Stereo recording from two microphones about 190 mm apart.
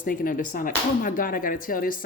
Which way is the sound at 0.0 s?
45° left (ahead or behind).